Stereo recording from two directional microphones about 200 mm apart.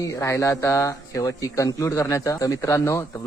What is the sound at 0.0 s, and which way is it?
Speech, 15° left (ahead or behind).